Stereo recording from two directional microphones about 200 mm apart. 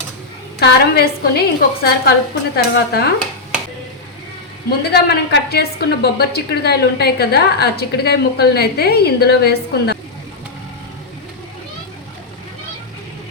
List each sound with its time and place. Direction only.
0.6 s a woman's voice: 55° left (ahead or behind)
4.8 s a woman's voice: 55° left (ahead or behind)